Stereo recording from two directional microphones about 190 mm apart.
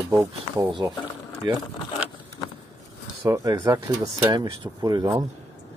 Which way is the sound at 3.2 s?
20° right (ahead or behind).